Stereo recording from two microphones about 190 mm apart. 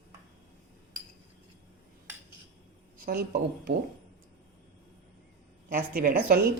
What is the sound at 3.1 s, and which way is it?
Speech, 55° right (ahead or behind).